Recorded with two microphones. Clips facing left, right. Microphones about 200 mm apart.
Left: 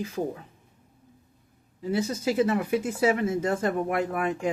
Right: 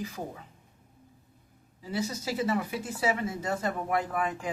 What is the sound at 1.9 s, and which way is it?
Speech, 50° left (ahead or behind).